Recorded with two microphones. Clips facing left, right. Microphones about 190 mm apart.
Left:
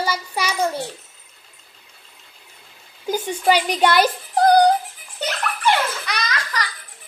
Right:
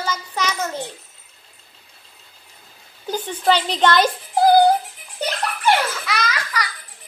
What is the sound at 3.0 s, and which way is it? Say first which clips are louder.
A child's voice: left 1 dB; 10° left (ahead or behind).